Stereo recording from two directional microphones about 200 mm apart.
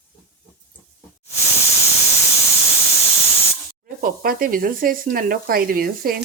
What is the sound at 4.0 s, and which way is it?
Speech, 45° right (ahead or behind).